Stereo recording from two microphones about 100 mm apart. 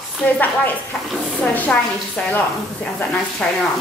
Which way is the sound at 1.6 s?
15° left (ahead or behind).